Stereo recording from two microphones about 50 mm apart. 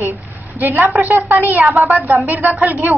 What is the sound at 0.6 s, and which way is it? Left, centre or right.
A woman's voice, right.